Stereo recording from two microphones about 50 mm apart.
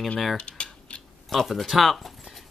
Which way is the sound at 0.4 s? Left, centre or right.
Left.